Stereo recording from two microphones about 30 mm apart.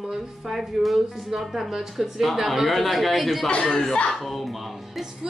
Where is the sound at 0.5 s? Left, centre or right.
Centre.